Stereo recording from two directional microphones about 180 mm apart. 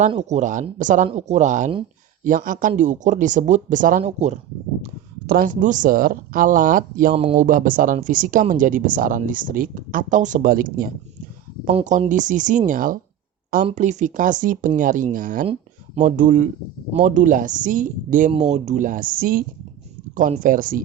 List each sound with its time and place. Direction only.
0.1 s speech: 40° right (ahead or behind)
4.8 s speech: 55° right (ahead or behind)
7.1 s speech: 30° right (ahead or behind)
7.3 s speech: 45° right (ahead or behind)
18.3 s speech: 35° right (ahead or behind)